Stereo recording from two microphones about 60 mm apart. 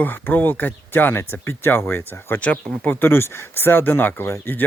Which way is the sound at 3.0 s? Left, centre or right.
Left.